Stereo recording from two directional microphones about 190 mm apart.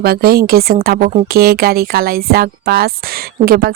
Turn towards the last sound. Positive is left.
turn(degrees=-55)  # may be behind; listen again after turning